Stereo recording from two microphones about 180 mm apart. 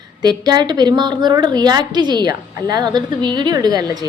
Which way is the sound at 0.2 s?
25° right (ahead or behind).